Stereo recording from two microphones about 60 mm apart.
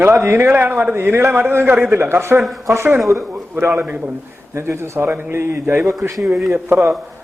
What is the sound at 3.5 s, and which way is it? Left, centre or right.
Speech, right.